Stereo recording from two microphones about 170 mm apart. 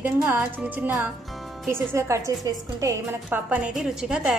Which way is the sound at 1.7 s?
15° right (ahead or behind).